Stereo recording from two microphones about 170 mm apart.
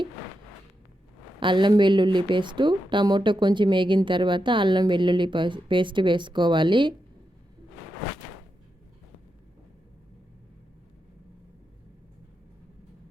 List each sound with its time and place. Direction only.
1.4 s a woman's voice: 30° right (ahead or behind)